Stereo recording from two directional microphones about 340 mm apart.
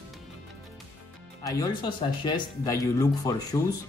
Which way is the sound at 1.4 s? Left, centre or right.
Centre.